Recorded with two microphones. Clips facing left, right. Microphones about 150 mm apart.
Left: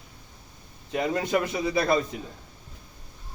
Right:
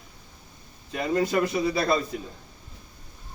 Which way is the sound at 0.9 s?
20° left (ahead or behind).